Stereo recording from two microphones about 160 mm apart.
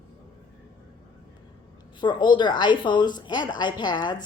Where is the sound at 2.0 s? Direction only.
30° left (ahead or behind).